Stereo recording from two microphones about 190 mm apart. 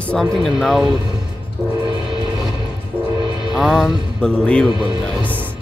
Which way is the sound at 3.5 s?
Centre (ahead or behind).